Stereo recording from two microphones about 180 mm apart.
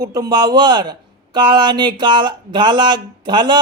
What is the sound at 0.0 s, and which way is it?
Speech, 20° right (ahead or behind).